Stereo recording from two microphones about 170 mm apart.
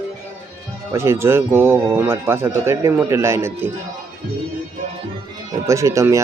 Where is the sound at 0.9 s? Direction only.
15° right (ahead or behind).